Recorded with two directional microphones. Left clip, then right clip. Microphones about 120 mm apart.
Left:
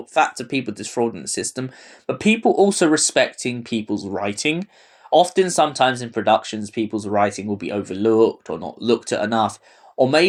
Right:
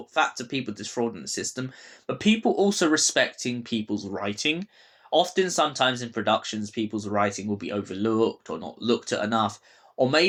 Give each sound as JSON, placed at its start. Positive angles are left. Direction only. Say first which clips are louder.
{"t": 0.1, "sound": "speech", "louder": "left 6 dB", "side_deg": 50}